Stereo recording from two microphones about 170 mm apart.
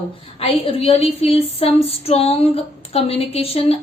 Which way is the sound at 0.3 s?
35° left (ahead or behind).